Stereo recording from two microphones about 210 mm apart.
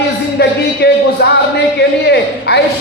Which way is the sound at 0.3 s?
50° left (ahead or behind).